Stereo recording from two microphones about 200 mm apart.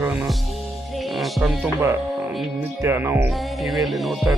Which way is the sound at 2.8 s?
10° right (ahead or behind).